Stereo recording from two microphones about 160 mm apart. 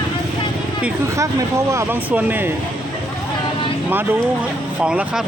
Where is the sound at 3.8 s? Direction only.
10° right (ahead or behind).